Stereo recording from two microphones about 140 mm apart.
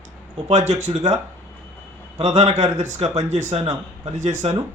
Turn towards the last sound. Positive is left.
turn(degrees=-60)  # may be behind; listen again after turning